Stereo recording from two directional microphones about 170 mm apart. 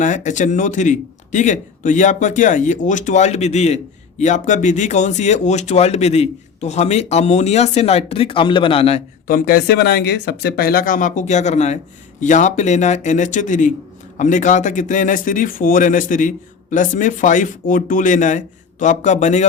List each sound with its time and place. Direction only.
0.0 s speech: 45° left (ahead or behind)
9.2 s speech: 55° left (ahead or behind)